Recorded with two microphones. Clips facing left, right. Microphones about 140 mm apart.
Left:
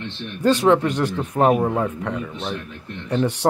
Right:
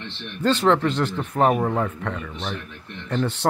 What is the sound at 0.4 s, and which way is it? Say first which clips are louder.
Speech: left 3 dB; 15° left (ahead or behind).